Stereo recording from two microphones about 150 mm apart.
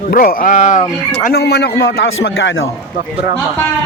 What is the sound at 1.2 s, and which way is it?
Speech, 90° left.